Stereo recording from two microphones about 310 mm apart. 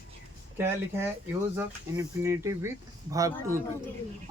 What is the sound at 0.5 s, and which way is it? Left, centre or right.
Speech, centre.